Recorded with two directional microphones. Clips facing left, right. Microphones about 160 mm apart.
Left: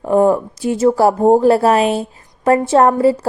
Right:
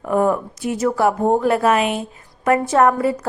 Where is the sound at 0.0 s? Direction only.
30° left (ahead or behind).